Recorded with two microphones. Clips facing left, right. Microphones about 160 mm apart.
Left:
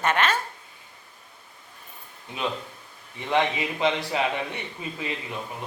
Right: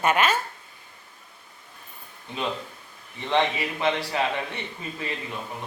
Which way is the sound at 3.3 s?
15° left (ahead or behind).